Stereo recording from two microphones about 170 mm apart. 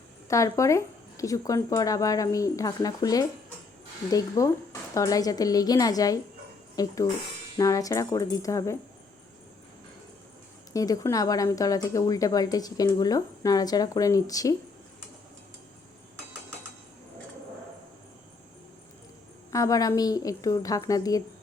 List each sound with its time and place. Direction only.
0.3 s a woman's voice: 20° left (ahead or behind)
10.7 s a woman's voice: 20° left (ahead or behind)
19.5 s a woman's voice: 20° left (ahead or behind)